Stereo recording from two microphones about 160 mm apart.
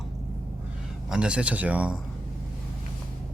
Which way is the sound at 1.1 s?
5° right (ahead or behind).